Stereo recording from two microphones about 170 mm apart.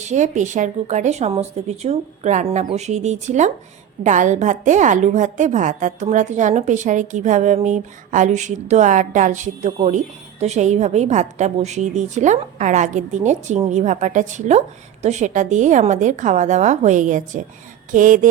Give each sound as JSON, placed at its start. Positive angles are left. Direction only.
{"t": 0.0, "sound": "a woman's voice", "side_deg": -45}